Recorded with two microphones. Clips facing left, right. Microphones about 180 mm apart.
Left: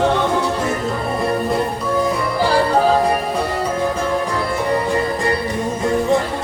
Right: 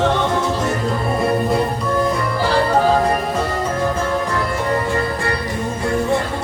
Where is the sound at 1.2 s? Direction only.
Centre (ahead or behind).